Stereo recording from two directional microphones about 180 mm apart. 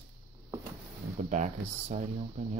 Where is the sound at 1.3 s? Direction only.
40° right (ahead or behind).